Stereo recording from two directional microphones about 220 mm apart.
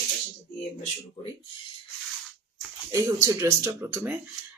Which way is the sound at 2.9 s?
15° right (ahead or behind).